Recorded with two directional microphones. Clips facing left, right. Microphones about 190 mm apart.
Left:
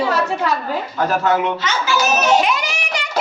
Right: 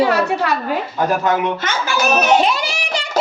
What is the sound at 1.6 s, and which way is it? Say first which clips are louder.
Speech: even; 55° right (ahead or behind).